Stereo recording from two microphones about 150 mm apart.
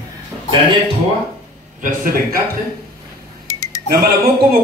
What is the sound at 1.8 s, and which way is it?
Speech, 85° right.